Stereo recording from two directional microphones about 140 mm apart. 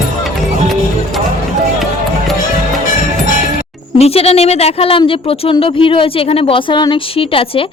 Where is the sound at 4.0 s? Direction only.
45° left (ahead or behind).